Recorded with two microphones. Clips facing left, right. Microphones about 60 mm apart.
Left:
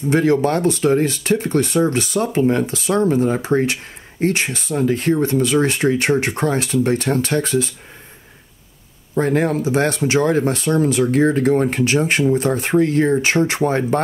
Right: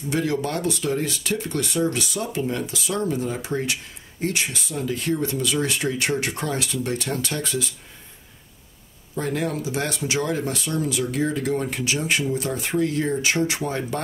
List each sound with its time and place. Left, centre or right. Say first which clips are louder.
0.1 s speech: left 8 dB; left
9.1 s speech: left 8 dB; left